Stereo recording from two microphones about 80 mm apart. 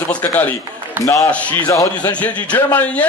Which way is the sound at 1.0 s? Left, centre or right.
Left.